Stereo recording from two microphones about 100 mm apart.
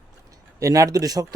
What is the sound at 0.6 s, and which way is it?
Speech, 35° right (ahead or behind).